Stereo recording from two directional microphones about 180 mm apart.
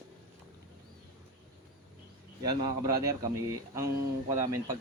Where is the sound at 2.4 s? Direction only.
20° right (ahead or behind).